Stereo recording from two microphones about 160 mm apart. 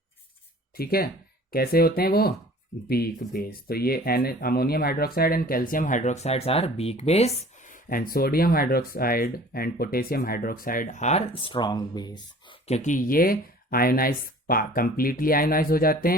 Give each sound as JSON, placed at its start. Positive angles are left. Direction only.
{"t": 0.8, "sound": "speech", "side_deg": 70}
{"t": 11.3, "sound": "speech", "side_deg": 35}
{"t": 12.6, "sound": "speech", "side_deg": 45}